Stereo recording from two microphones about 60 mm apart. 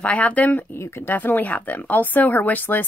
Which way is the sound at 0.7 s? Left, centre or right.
Left.